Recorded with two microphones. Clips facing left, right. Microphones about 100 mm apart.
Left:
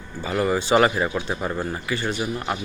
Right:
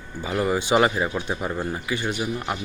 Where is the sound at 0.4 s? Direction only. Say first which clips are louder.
Left 1 dB; 10° right (ahead or behind).